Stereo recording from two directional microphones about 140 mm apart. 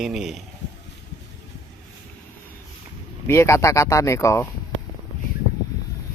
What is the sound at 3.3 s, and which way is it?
Speech, 20° left (ahead or behind).